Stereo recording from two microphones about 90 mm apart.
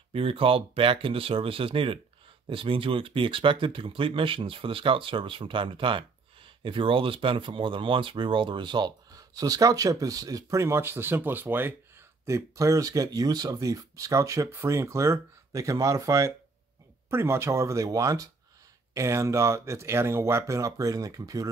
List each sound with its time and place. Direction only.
0.1 s speech: 90° right
2.5 s speech: 75° right (ahead or behind); by 11.7 s 20° right (ahead or behind)
12.3 s speech: 35° right (ahead or behind)